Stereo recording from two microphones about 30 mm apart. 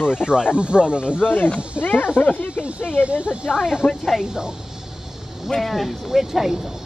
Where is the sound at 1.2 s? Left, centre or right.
Left.